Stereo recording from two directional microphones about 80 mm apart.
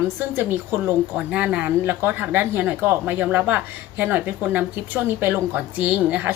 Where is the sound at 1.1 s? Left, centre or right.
Centre.